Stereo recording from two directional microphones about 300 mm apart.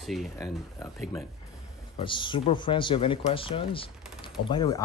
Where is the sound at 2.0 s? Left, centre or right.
Centre.